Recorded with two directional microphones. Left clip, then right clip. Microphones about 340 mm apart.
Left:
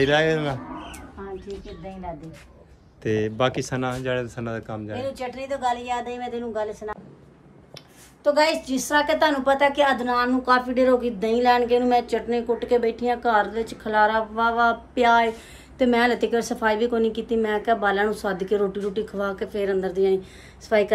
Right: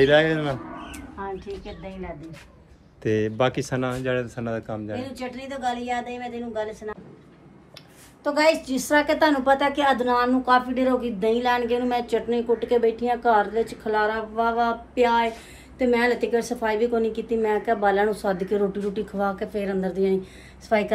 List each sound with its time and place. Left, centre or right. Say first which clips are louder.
0.0 s a woman's voice: right 2 dB; centre
1.2 s a sound: right 5 dB; centre
3.0 s a woman's voice: even; centre
8.2 s a woman's voice: left 1 dB; centre